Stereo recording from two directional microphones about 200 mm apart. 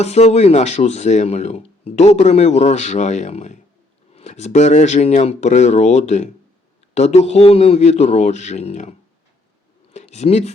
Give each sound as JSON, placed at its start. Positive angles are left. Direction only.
{"t": 0.0, "sound": "speech", "side_deg": 30}